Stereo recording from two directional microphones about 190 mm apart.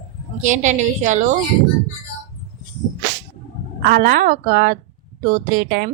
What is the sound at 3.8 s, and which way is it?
A woman's voice, 50° right (ahead or behind).